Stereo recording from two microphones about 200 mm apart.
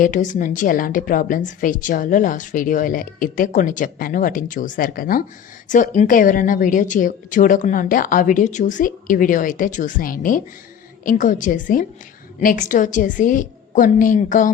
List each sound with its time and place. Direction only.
0.0 s a woman's voice: 40° left (ahead or behind)